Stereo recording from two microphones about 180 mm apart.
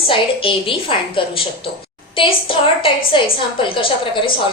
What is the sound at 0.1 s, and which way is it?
A woman's voice, 30° left (ahead or behind).